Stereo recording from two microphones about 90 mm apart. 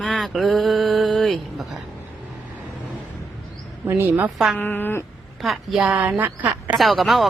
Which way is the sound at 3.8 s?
25° right (ahead or behind).